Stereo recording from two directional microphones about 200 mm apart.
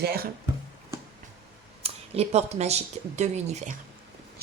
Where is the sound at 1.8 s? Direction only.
30° right (ahead or behind).